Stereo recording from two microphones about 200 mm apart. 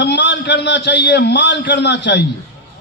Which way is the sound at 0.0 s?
60° left (ahead or behind).